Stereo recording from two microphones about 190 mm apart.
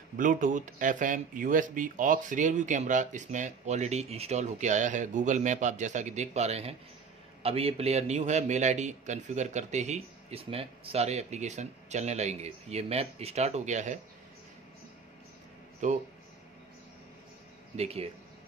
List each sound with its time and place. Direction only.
0.2 s speech: 45° right (ahead or behind)
15.8 s speech: 40° right (ahead or behind)
17.7 s speech: 30° right (ahead or behind)